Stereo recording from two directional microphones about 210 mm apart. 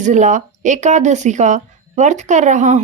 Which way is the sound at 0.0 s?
35° right (ahead or behind).